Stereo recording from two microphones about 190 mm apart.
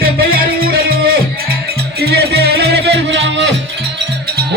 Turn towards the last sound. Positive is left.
turn(degrees=-65)  # may be behind; listen again after turning